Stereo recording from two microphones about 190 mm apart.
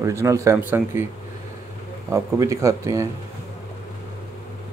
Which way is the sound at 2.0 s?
15° right (ahead or behind).